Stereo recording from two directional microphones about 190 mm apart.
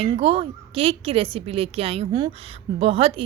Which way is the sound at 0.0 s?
30° right (ahead or behind).